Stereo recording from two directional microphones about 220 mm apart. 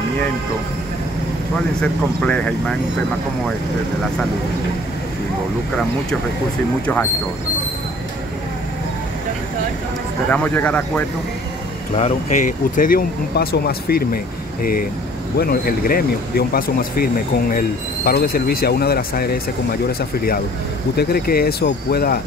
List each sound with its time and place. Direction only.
1.8 s speech: 5° left (ahead or behind)
10.3 s speech: 5° left (ahead or behind)
12.0 s speech: 35° left (ahead or behind)